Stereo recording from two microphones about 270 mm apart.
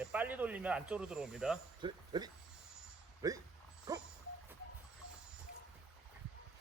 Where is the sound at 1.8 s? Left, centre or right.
Centre.